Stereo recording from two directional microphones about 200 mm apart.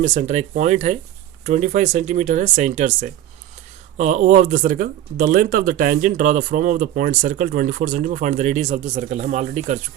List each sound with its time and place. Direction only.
0.0 s speech: 35° right (ahead or behind)